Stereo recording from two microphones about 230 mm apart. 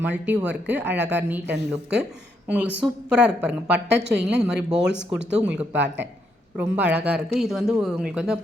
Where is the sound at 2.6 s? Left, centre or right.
Centre.